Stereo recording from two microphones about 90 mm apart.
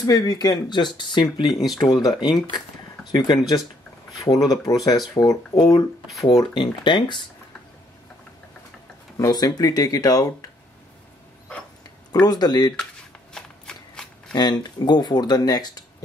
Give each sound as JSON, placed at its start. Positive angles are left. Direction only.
{"t": 0.0, "sound": "speech", "side_deg": 45}
{"t": 1.5, "sound": "speech", "side_deg": 0}
{"t": 1.8, "sound": "speech", "side_deg": 50}
{"t": 6.5, "sound": "speech", "side_deg": 60}
{"t": 9.1, "sound": "speech", "side_deg": 45}
{"t": 12.1, "sound": "speech", "side_deg": 50}
{"t": 13.3, "sound": "shuffling cards", "side_deg": 5}
{"t": 14.3, "sound": "speech", "side_deg": 50}